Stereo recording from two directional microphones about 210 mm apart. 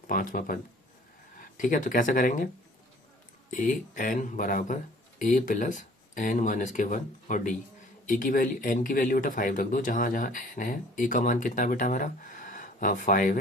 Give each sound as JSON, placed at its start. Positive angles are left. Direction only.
{"t": 0.1, "sound": "speech", "side_deg": 40}
{"t": 3.5, "sound": "speech", "side_deg": 40}